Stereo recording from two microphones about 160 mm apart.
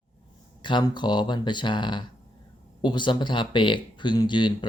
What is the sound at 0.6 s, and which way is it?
Speech, 30° left (ahead or behind).